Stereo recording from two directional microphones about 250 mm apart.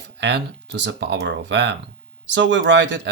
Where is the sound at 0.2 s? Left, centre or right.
Right.